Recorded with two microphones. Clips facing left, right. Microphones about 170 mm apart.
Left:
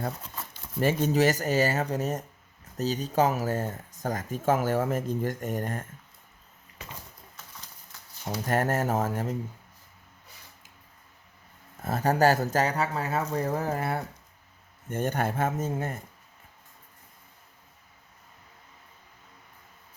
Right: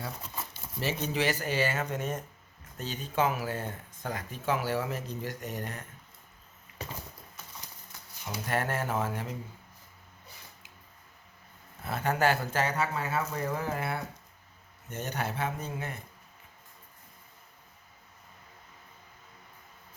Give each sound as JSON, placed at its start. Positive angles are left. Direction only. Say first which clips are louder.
{"t": 0.8, "sound": "speech", "louder": "left 7 dB", "side_deg": 45}
{"t": 6.8, "sound": "horse", "louder": "right 4 dB", "side_deg": -35}
{"t": 8.2, "sound": "speech", "louder": "left 5 dB", "side_deg": 40}
{"t": 11.8, "sound": "speech", "louder": "left 5 dB", "side_deg": 40}